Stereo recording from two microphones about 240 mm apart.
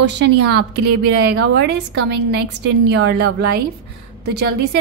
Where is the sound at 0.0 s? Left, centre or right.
Right.